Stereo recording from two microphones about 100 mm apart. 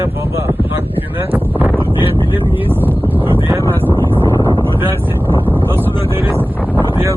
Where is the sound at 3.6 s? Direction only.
20° left (ahead or behind).